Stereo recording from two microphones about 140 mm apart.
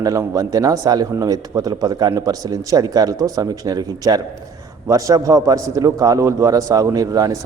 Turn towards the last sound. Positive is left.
turn(degrees=-25)  # may be behind; listen again after turning